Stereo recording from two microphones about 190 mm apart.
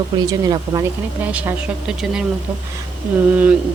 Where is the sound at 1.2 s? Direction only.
10° right (ahead or behind).